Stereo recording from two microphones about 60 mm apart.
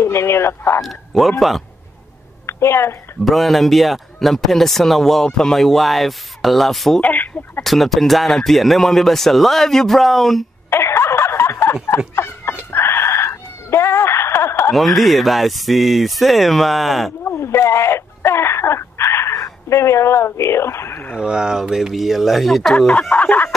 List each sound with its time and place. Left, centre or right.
0.0 s speech: left
0.8 s speech: centre
2.4 s a woman's voice: left
3.3 s speech: centre
7.0 s speech: left
7.6 s speech: centre
10.7 s a sound: left
12.7 s cat: left
14.7 s speech: centre
17.2 s a sound: left
21.2 s speech: centre
22.6 s chicken: centre; by 23.5 s left